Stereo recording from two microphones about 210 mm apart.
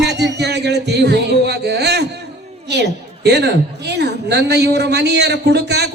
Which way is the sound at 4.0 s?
55° right (ahead or behind).